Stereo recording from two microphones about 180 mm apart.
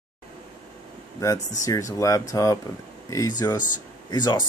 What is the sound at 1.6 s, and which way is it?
Speech, 20° left (ahead or behind).